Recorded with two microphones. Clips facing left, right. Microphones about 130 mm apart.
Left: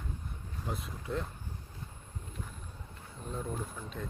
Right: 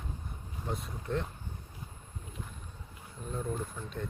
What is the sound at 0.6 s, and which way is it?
Speech, centre (ahead or behind).